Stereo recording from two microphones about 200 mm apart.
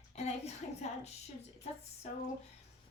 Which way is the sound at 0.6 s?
35° left (ahead or behind).